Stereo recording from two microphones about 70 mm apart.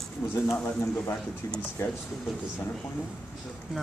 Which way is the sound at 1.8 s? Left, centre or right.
Left.